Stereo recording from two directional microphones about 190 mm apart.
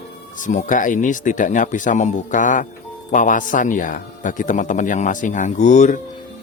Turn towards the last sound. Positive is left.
turn(degrees=40)  # may be behind; listen again after turning